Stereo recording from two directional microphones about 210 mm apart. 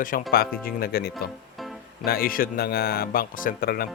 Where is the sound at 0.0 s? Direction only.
40° left (ahead or behind).